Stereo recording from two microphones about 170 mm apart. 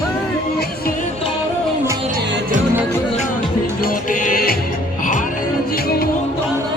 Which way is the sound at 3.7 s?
55° left (ahead or behind).